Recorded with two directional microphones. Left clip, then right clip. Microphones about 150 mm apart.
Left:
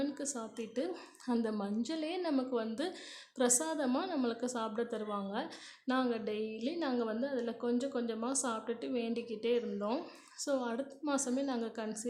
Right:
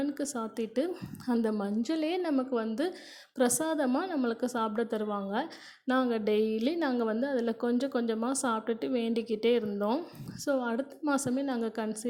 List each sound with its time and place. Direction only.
0.1 s a woman's voice: 30° right (ahead or behind)
3.8 s a woman's voice: 15° right (ahead or behind); by 9.9 s 35° right (ahead or behind)
10.4 s a woman's voice: 25° right (ahead or behind)